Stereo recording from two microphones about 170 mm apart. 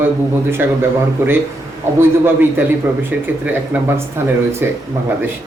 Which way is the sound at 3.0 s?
10° right (ahead or behind).